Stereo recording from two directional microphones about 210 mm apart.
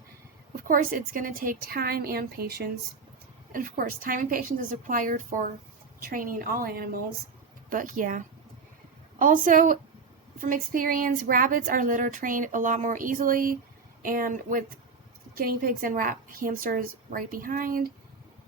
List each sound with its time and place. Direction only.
0.5 s a woman's voice: 40° right (ahead or behind)